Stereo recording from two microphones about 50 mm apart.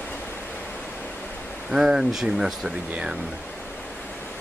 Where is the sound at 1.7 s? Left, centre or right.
Centre.